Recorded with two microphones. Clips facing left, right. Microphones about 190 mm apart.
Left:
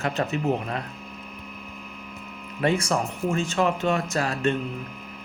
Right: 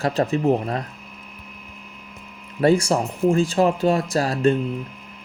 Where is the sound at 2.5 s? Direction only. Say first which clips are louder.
Right 6 dB; 35° right (ahead or behind).